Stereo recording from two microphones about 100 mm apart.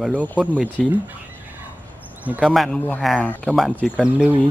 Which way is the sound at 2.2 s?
10° right (ahead or behind).